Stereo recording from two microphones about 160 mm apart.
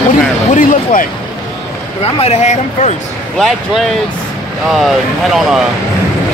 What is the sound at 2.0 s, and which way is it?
Speech, 40° left (ahead or behind).